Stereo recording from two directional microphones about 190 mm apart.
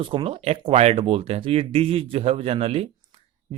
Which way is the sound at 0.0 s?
30° right (ahead or behind).